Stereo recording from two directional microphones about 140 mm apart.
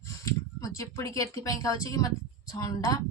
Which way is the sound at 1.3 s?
25° left (ahead or behind).